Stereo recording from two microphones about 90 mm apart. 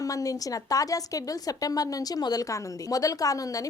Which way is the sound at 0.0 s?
40° left (ahead or behind).